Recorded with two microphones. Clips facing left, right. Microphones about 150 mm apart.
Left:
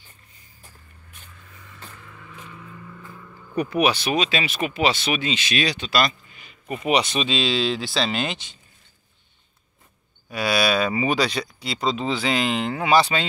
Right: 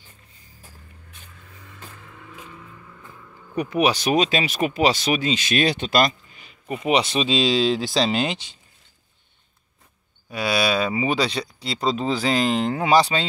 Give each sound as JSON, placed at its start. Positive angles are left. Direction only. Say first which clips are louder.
{"t": 3.8, "sound": "speech", "louder": "right 3 dB", "side_deg": -40}
{"t": 6.9, "sound": "speech", "louder": "right 1 dB", "side_deg": -30}
{"t": 10.3, "sound": "speech", "louder": "even", "side_deg": -25}